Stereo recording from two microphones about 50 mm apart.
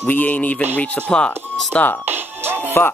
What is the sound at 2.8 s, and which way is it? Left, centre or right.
Music, left.